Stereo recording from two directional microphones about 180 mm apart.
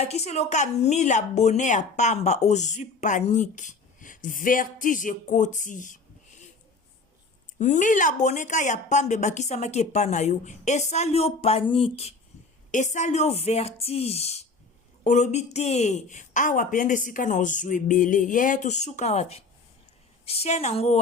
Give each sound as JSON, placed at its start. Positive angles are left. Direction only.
{"t": 0.0, "sound": "a woman's voice", "side_deg": 35}
{"t": 7.6, "sound": "a woman's voice", "side_deg": 45}